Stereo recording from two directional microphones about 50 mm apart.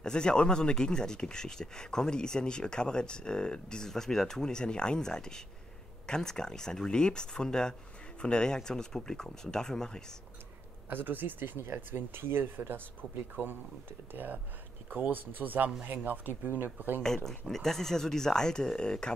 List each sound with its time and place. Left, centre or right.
0.0 s speech: centre
10.9 s speech: right
14.1 s speech: right
17.3 s speech: centre